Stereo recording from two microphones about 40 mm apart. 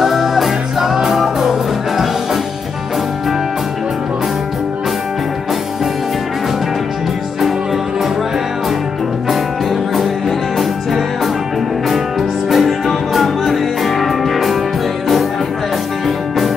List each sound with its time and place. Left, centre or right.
0.0 s music: centre
9.3 s music: centre
12.4 s music: centre